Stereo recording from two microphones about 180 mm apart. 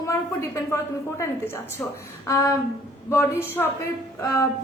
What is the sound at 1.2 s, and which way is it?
A woman's voice, 10° left (ahead or behind).